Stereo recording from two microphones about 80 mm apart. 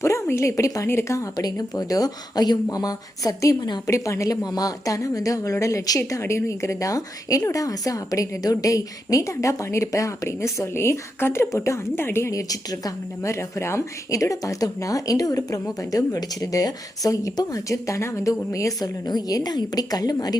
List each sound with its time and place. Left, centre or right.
0.0 s a woman's voice: left
1.5 s a woman's voice: left
12.3 s speech: left
13.6 s speech: left
19.0 s a woman's voice: left